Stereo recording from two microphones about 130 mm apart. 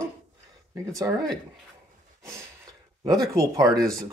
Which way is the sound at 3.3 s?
30° right (ahead or behind).